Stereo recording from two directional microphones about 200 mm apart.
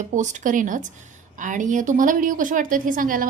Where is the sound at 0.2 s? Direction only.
40° right (ahead or behind).